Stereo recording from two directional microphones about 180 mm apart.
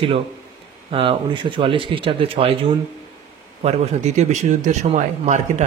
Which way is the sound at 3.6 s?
35° right (ahead or behind).